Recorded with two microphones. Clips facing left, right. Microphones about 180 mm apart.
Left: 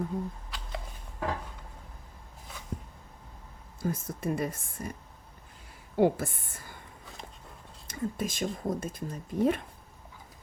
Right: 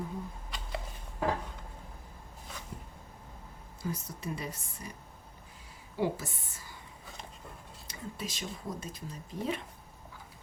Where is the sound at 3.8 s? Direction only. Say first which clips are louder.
Left 5 dB; 50° left (ahead or behind).